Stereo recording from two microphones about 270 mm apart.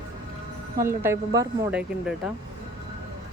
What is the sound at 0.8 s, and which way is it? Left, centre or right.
Speech, centre.